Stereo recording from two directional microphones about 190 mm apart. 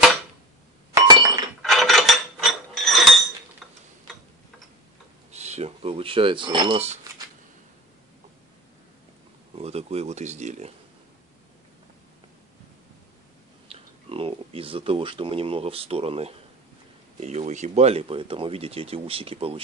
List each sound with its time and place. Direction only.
0.9 s chink: 20° right (ahead or behind)
1.6 s mechanisms: centre (ahead or behind)
5.3 s speech: 35° right (ahead or behind)
9.6 s speech: 35° right (ahead or behind)
13.7 s speech: 30° right (ahead or behind)